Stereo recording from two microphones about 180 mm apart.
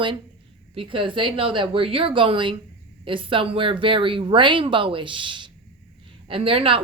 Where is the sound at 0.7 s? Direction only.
30° right (ahead or behind).